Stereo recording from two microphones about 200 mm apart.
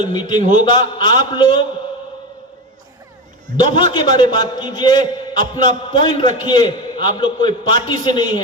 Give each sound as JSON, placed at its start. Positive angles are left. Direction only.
{"t": 0.0, "sound": "a man's voice", "side_deg": 20}
{"t": 3.6, "sound": "a man's voice", "side_deg": 20}